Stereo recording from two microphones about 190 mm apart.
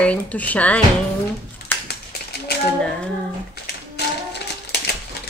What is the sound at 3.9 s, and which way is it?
Music, 60° left (ahead or behind).